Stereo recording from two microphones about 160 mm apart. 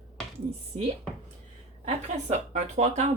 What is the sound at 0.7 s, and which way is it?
Speech, 40° right (ahead or behind).